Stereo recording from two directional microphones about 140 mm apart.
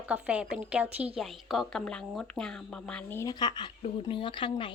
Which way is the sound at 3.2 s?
30° left (ahead or behind).